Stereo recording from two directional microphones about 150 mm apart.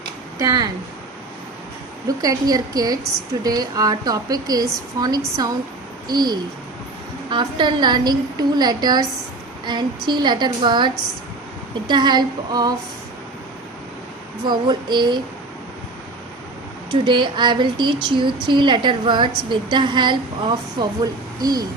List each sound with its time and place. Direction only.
0.3 s speech: 25° right (ahead or behind)
2.0 s speech: 25° right (ahead or behind)
14.4 s speech: 30° right (ahead or behind)
16.9 s speech: 30° right (ahead or behind)